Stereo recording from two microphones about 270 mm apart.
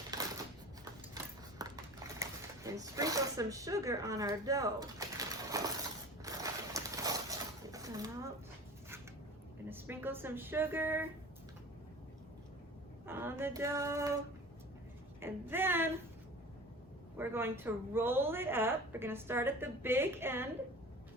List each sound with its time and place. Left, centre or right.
1.1 s typewriter: centre
6.2 s a sound: centre
9.6 s a woman's voice: centre
13.1 s a sound: centre
15.2 s a woman's voice: centre
17.2 s a woman's voice: centre